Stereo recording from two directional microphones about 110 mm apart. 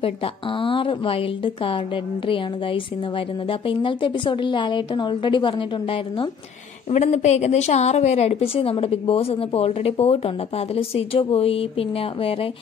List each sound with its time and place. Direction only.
0.6 s a woman's voice: 55° left (ahead or behind)
6.9 s a woman's voice: 90° left; by 11.6 s 60° left (ahead or behind)